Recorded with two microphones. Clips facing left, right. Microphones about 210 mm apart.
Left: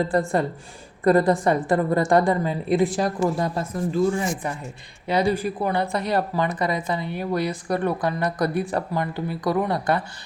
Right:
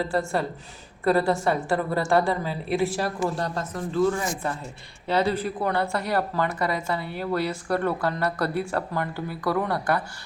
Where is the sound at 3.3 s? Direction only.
10° left (ahead or behind).